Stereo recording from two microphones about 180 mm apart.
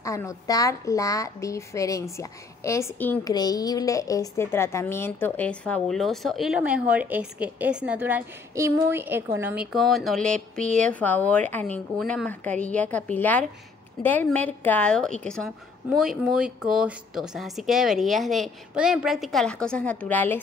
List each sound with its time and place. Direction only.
0.0 s a woman's voice: 15° left (ahead or behind); by 9.7 s 10° right (ahead or behind)
9.7 s a woman's voice: centre (ahead or behind)